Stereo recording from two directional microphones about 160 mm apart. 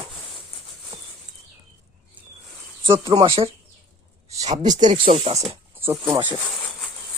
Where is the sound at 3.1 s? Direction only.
30° right (ahead or behind).